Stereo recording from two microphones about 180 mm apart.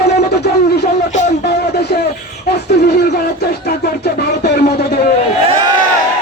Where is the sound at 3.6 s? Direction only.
60° left (ahead or behind).